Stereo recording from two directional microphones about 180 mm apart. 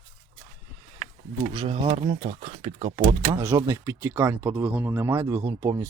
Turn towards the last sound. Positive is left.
turn(degrees=-20)  # may be behind; listen again after turning